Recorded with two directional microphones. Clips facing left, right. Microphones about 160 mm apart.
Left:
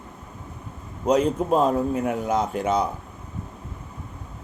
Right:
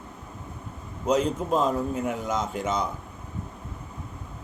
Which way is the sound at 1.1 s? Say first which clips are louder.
Left 4 dB; 60° left (ahead or behind).